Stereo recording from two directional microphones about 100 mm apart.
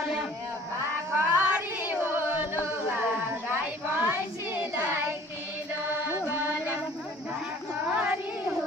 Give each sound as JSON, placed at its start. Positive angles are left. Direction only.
{"t": 1.1, "sound": "female singing", "side_deg": -15}
{"t": 2.6, "sound": "a sound", "side_deg": -15}
{"t": 5.9, "sound": "music", "side_deg": -20}
{"t": 7.9, "sound": "child singing", "side_deg": -15}